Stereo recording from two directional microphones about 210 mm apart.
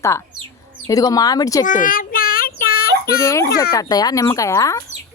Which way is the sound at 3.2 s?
15° left (ahead or behind).